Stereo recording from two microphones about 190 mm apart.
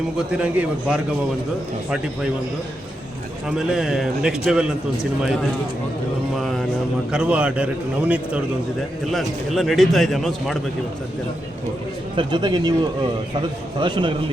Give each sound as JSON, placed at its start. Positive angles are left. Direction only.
{"t": 0.3, "sound": "a man's voice", "side_deg": -5}
{"t": 3.5, "sound": "a man's voice", "side_deg": -5}
{"t": 6.3, "sound": "a man's voice", "side_deg": 0}
{"t": 12.1, "sound": "speech", "side_deg": -25}
{"t": 13.7, "sound": "speech", "side_deg": -25}